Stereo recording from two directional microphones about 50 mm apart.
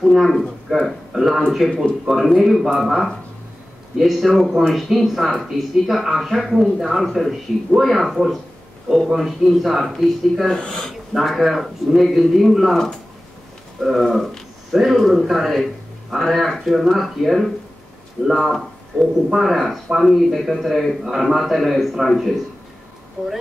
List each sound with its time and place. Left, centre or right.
0.0 s speech: centre
10.5 s speech: centre
10.9 s speech: centre
13.7 s a sound: centre
14.0 s a sound: centre
15.0 s speech: centre